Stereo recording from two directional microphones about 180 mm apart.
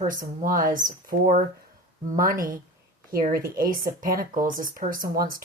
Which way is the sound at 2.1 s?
50° right (ahead or behind).